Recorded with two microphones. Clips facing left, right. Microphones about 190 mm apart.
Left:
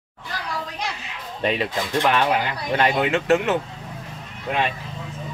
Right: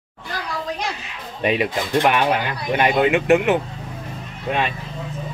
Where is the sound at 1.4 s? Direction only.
10° right (ahead or behind).